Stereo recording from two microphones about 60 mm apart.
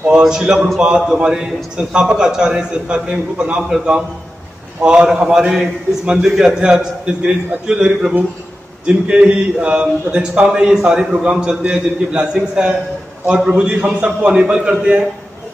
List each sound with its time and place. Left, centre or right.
0.2 s a man's voice: centre
4.8 s a man's voice: centre
8.8 s a sound: centre
10.1 s a man's voice: centre